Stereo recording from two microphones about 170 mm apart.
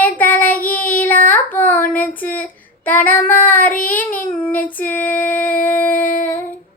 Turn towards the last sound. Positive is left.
turn(degrees=50)  # may be behind; listen again after turning